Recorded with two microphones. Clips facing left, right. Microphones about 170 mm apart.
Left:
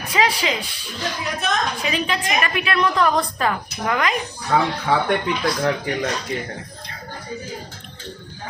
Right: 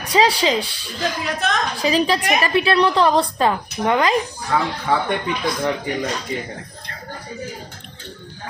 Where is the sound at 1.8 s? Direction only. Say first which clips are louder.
Right 5 dB; 35° right (ahead or behind).